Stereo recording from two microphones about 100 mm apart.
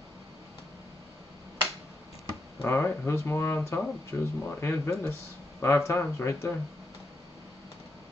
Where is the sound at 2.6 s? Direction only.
25° left (ahead or behind).